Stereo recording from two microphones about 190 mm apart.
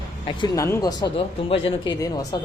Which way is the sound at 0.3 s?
25° left (ahead or behind).